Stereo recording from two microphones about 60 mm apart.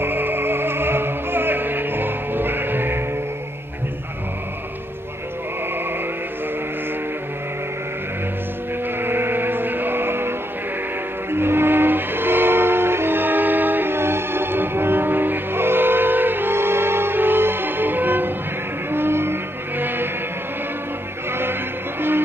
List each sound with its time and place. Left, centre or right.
0.0 s music: right
9.0 s music: right
11.3 s train: right
18.9 s music: right
21.3 s music: right